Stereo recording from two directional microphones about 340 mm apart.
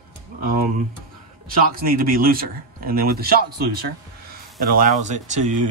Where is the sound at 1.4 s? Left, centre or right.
Right.